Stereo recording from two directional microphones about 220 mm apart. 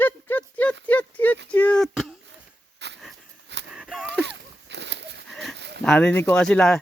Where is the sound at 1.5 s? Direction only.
5° left (ahead or behind).